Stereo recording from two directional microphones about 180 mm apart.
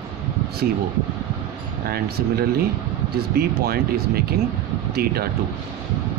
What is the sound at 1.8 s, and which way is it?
Speech, 60° right (ahead or behind).